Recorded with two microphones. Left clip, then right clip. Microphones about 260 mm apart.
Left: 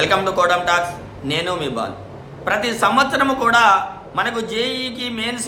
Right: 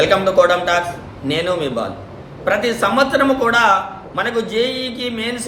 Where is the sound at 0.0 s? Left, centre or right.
Centre.